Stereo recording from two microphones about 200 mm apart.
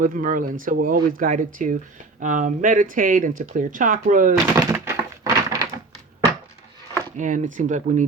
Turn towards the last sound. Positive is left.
turn(degrees=-40)  # may be behind; listen again after turning